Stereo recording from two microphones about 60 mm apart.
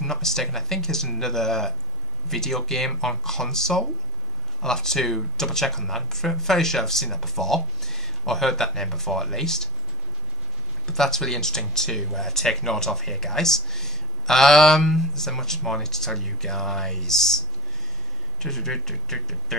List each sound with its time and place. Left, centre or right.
0.0 s speech: centre
10.9 s speech: centre
18.4 s speech: centre